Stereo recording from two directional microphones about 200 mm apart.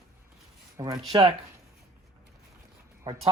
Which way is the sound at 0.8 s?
20° right (ahead or behind).